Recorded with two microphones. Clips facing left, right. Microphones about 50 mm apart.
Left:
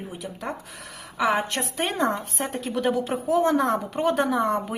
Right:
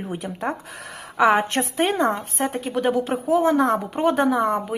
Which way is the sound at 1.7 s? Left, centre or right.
Centre.